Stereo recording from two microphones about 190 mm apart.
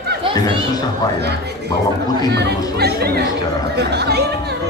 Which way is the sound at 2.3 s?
60° right (ahead or behind).